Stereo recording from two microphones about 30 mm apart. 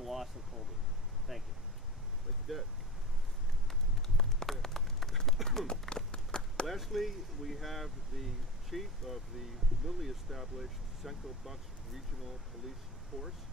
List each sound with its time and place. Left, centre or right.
0.0 s a sound: centre
1.3 s speech: centre
2.5 s speech: centre
4.5 s run: centre
5.9 s a sound: left
6.7 s speech: centre
13.1 s speech: right